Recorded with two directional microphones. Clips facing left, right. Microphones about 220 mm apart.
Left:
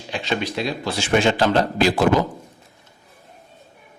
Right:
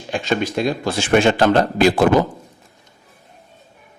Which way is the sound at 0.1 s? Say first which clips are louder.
Right 4 dB; 45° right (ahead or behind).